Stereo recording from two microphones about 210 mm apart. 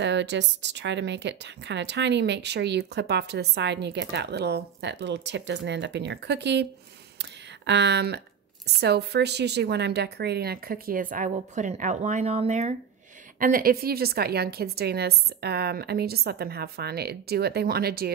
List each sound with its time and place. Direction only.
0.0 s a woman's voice: 55° right (ahead or behind)
7.2 s a sound: 55° right (ahead or behind)
8.8 s a woman's voice: 50° right (ahead or behind); by 12.7 s 35° right (ahead or behind)
13.4 s a woman's voice: 45° right (ahead or behind)